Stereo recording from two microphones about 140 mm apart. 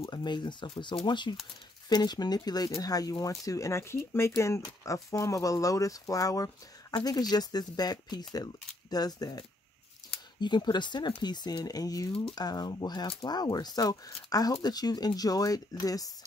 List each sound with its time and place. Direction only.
0.0 s speech: 30° left (ahead or behind)
10.4 s speech: 30° left (ahead or behind)